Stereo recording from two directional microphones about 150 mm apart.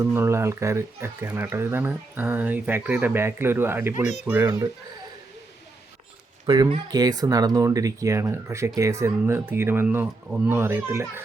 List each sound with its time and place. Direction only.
0.0 s speech: 15° right (ahead or behind)
6.4 s speech: 30° right (ahead or behind); by 11.2 s 15° right (ahead or behind)